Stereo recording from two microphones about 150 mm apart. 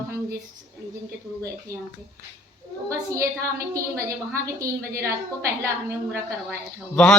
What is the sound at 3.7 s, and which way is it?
A woman's voice, 20° right (ahead or behind).